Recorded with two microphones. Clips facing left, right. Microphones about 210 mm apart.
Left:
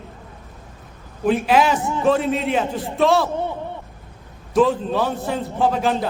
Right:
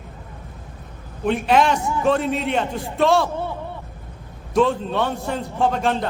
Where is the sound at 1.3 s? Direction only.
5° left (ahead or behind).